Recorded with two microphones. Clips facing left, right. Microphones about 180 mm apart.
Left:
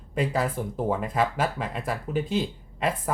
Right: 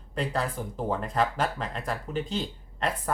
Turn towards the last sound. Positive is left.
turn(degrees=10)  # may be behind; listen again after turning